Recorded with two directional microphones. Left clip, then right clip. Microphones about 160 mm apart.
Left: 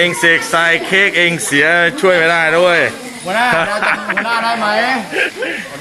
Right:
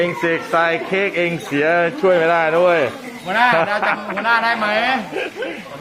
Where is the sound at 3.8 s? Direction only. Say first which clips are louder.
Left 3 dB; 5° left (ahead or behind).